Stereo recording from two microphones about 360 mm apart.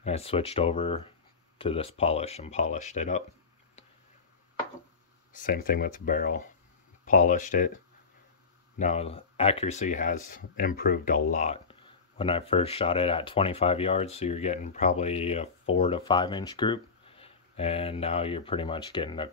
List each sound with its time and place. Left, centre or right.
0.0 s speech: centre
5.3 s speech: left